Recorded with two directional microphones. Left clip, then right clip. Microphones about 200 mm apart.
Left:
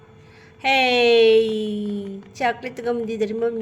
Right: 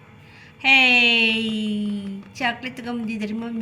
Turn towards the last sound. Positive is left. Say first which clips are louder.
# left 8 dB
turn(degrees=50)  # may be behind; listen again after turning